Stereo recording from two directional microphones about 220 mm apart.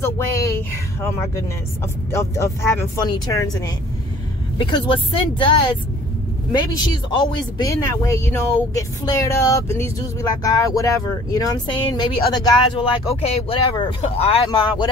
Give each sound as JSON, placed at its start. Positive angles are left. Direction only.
{"t": 0.0, "sound": "speech", "side_deg": 10}
{"t": 7.2, "sound": "speech", "side_deg": 20}